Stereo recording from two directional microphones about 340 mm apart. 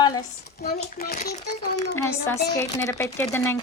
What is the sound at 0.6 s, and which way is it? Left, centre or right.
Speech, left.